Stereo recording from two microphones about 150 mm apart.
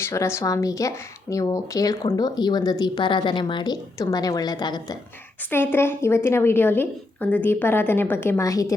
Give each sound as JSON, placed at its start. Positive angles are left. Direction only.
{"t": 0.0, "sound": "a woman's voice", "side_deg": 20}
{"t": 5.5, "sound": "a woman's voice", "side_deg": 15}